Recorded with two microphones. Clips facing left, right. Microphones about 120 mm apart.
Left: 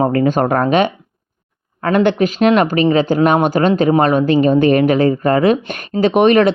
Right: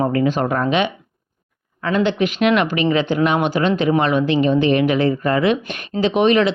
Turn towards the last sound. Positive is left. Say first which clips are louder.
# left 4 dB
turn(degrees=50)  # may be behind; listen again after turning